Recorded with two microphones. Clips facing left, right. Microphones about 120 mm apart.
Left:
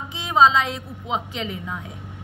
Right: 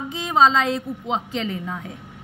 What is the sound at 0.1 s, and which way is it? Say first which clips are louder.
A woman's voice: left 1 dB; 40° right (ahead or behind).